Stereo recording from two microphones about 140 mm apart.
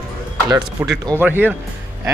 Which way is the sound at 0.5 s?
30° right (ahead or behind).